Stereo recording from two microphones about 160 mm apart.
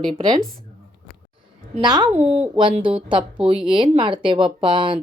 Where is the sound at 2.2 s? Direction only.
40° right (ahead or behind).